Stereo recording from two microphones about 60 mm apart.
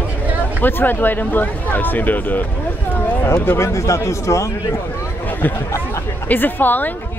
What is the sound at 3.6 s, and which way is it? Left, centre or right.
Speech, left.